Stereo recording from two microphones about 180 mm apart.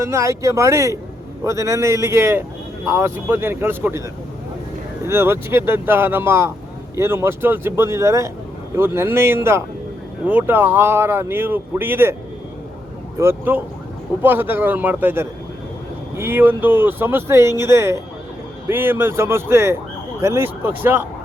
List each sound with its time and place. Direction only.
0.0 s speech: 15° right (ahead or behind)
5.0 s speech: 15° right (ahead or behind)
13.1 s speech: 10° right (ahead or behind)